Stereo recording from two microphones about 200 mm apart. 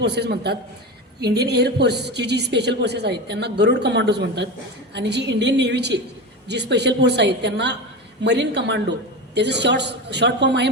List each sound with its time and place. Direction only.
0.0 s a woman's voice: 55° right (ahead or behind)